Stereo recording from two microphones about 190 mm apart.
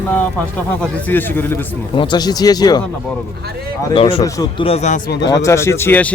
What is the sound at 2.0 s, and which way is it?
Speech, 25° left (ahead or behind).